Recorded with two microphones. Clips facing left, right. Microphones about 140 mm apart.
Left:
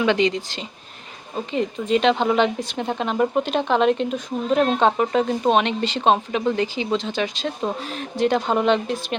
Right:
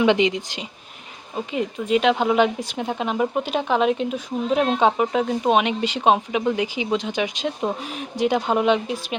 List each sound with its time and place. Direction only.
0.0 s speech: 20° right (ahead or behind)
1.5 s speech: 5° right (ahead or behind)